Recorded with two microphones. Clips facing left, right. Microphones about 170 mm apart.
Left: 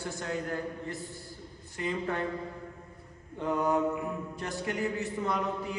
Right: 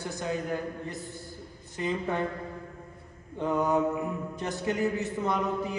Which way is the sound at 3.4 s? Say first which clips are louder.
Right 2 dB; 20° right (ahead or behind).